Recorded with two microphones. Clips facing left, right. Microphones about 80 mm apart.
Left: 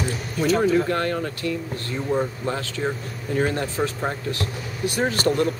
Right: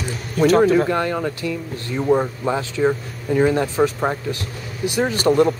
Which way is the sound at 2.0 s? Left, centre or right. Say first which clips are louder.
Right 6 dB; right.